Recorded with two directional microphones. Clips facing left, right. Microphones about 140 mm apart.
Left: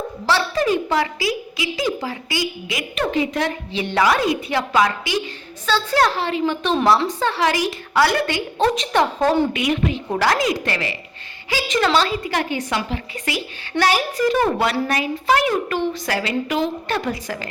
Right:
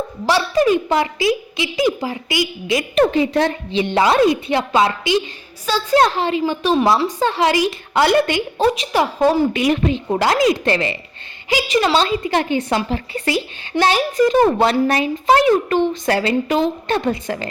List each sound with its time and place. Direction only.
0.3 s a woman's voice: 15° right (ahead or behind)
2.6 s a woman's voice: 35° right (ahead or behind); by 8.6 s 15° right (ahead or behind)
8.6 s a woman's voice: 5° right (ahead or behind)
9.5 s a woman's voice: 35° right (ahead or behind)
9.9 s a woman's voice: 20° right (ahead or behind)
11.4 s a woman's voice: 15° right (ahead or behind)